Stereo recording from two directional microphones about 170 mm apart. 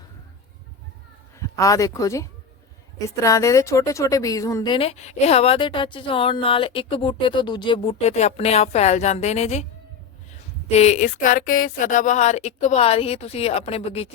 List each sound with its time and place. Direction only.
1.4 s a woman's voice: 20° left (ahead or behind); by 9.6 s 40° left (ahead or behind)
10.7 s a woman's voice: 40° left (ahead or behind)